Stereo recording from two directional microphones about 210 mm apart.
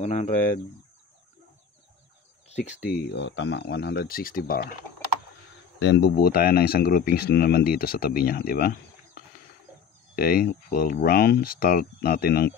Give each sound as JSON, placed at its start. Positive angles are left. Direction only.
{"t": 0.0, "sound": "speech", "side_deg": 35}
{"t": 2.4, "sound": "a sound", "side_deg": 30}
{"t": 2.9, "sound": "speech", "side_deg": 55}
{"t": 5.8, "sound": "speech", "side_deg": 55}